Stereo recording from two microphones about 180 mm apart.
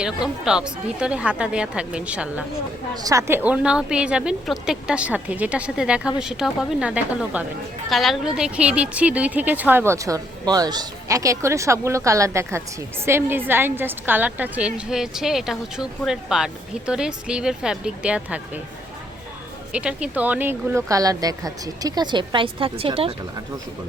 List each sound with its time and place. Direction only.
0.0 s a woman's voice: 5° right (ahead or behind)
3.0 s a woman's voice: 20° right (ahead or behind)
19.7 s speech: 5° right (ahead or behind); by 23.1 s 30° right (ahead or behind)